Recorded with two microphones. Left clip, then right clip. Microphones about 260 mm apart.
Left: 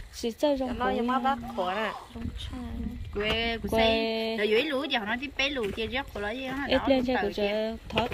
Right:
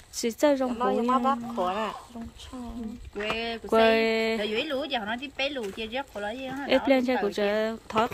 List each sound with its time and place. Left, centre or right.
0.2 s speech: centre
0.7 s speech: right
3.3 s speech: centre